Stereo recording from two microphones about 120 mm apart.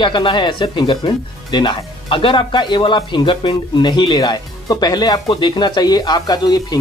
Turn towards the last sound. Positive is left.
turn(degrees=35)  # may be behind; listen again after turning